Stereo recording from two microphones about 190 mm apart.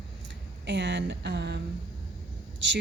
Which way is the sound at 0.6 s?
65° right (ahead or behind).